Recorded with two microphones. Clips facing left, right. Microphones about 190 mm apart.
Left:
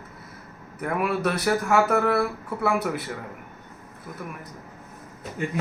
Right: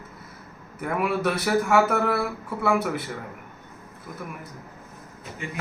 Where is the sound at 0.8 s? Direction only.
Centre (ahead or behind).